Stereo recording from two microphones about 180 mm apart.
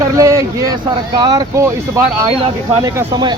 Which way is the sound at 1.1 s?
25° right (ahead or behind).